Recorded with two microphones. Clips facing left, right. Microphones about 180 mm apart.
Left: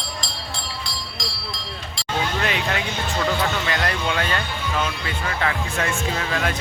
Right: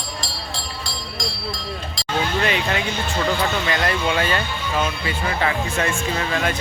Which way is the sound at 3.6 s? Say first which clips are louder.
Right 3 dB; centre (ahead or behind).